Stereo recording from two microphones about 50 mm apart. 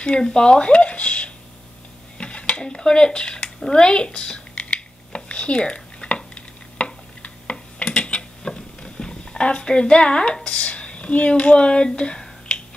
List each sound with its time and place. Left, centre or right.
0.2 s speech: centre
2.1 s dishes: left
3.5 s a sound: centre
7.8 s dishes: left